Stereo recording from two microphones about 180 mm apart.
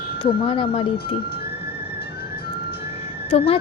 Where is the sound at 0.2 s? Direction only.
30° left (ahead or behind).